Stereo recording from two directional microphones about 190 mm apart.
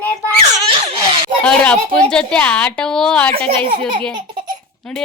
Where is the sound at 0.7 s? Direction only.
30° right (ahead or behind).